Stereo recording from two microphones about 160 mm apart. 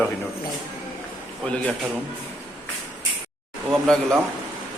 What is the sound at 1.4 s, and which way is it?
Speech, 5° left (ahead or behind).